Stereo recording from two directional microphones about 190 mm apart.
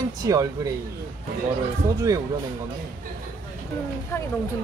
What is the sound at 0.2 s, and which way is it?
Speech, 20° right (ahead or behind).